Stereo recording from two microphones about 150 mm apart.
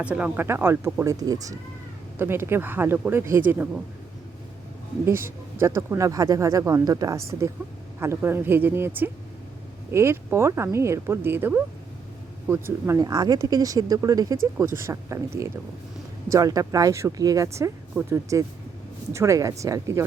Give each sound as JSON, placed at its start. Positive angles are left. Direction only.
{"t": 0.0, "sound": "speech", "side_deg": -10}
{"t": 5.0, "sound": "speech", "side_deg": -15}